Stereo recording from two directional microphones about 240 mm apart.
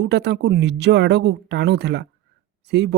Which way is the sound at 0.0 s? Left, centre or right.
Right.